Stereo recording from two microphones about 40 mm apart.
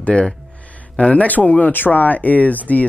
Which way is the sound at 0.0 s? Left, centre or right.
Left.